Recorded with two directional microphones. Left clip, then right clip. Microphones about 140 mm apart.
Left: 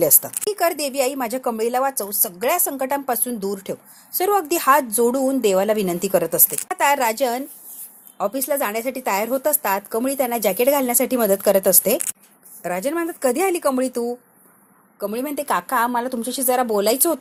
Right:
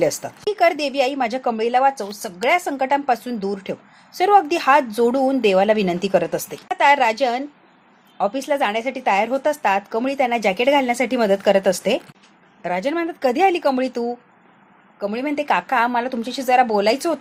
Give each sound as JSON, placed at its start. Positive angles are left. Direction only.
{"t": 0.0, "sound": "a woman's voice", "side_deg": 35}
{"t": 14.9, "sound": "speech", "side_deg": 45}